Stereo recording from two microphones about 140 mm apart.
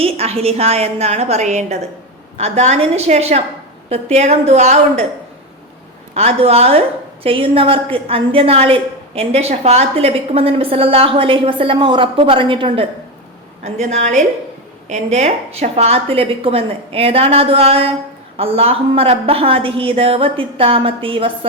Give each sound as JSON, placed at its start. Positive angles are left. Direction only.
{"t": 0.0, "sound": "a woman's voice", "side_deg": -45}
{"t": 6.1, "sound": "a woman's voice", "side_deg": -50}
{"t": 13.7, "sound": "a woman's voice", "side_deg": -55}